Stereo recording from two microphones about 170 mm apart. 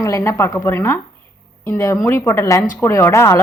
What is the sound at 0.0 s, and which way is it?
A woman's voice, 20° left (ahead or behind).